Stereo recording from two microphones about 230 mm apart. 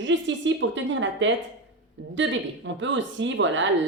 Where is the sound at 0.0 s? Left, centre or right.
Right.